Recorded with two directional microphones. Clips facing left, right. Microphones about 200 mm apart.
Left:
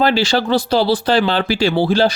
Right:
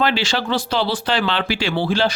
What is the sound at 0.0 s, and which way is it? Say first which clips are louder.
Speech: left 5 dB; 40° left (ahead or behind).